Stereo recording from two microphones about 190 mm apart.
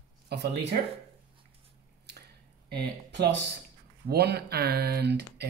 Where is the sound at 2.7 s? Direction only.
65° right (ahead or behind).